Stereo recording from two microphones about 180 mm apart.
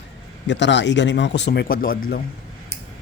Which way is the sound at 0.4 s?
80° left.